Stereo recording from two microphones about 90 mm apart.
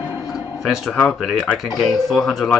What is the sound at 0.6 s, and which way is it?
Speech, centre (ahead or behind).